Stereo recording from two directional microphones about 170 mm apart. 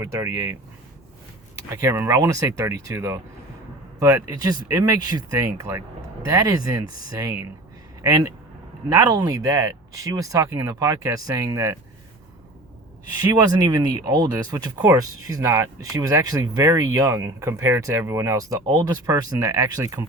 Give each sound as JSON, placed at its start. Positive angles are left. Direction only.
{"t": 0.0, "sound": "speech", "side_deg": -20}
{"t": 1.7, "sound": "speech", "side_deg": -15}
{"t": 13.3, "sound": "speech", "side_deg": -20}